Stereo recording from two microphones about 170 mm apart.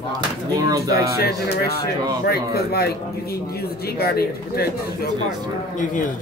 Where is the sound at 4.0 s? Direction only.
65° left (ahead or behind).